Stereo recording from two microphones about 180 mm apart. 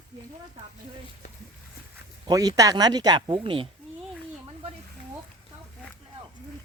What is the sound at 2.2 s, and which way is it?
Speech, 20° right (ahead or behind).